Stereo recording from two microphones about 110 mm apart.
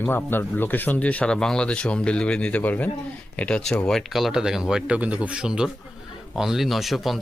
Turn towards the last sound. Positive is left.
turn(degrees=0)  # may be behind; listen again after turning